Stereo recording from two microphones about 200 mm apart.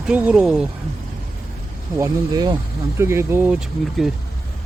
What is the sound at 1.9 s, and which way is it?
Speech, 15° right (ahead or behind).